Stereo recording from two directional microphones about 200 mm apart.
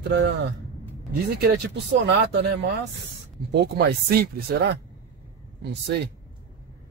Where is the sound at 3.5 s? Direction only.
55° right (ahead or behind).